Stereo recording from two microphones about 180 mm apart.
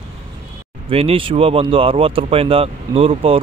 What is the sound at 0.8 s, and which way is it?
Speech, 30° right (ahead or behind).